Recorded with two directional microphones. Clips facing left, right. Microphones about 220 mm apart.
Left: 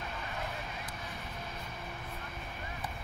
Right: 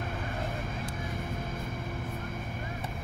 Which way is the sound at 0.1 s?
50° right (ahead or behind).